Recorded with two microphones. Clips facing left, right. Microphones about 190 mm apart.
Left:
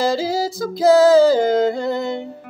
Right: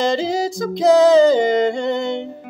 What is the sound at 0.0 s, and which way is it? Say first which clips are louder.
Music: right 1 dB; 5° left (ahead or behind).